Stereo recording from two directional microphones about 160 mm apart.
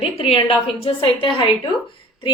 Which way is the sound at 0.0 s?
40° left (ahead or behind).